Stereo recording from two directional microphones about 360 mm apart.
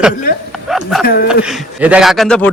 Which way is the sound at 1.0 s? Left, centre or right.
Left.